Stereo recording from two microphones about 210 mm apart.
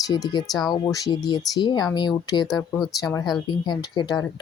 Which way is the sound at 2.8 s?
15° left (ahead or behind).